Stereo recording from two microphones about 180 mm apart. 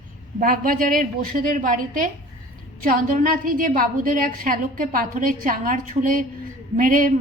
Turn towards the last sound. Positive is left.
turn(degrees=-50)  # may be behind; listen again after turning